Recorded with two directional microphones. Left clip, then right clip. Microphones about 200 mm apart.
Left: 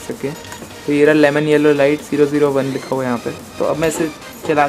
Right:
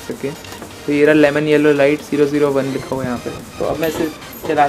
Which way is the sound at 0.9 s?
5° left (ahead or behind).